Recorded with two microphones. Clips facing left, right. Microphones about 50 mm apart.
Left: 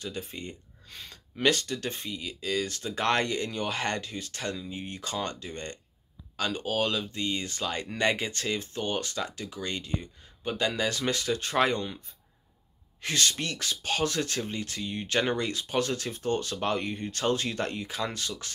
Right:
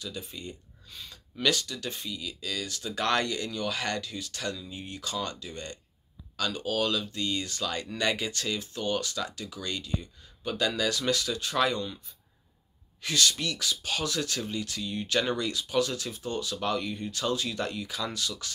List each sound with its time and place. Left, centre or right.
0.0 s speech: left
13.0 s speech: left